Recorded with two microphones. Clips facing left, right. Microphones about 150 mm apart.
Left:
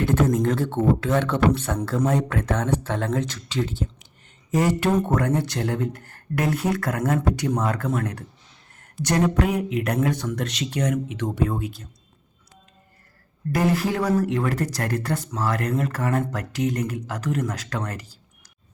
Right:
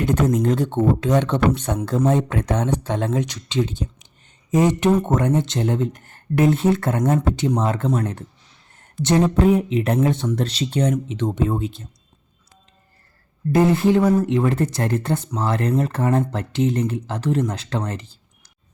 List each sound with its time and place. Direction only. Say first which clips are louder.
0.0 s speech: right 1 dB; 20° right (ahead or behind)
13.5 s speech: right 6 dB; 25° right (ahead or behind)